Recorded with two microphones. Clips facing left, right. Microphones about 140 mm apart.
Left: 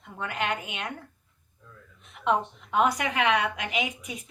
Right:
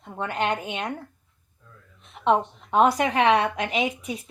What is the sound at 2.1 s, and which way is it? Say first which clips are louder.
A woman's voice: right 4 dB; 35° right (ahead or behind).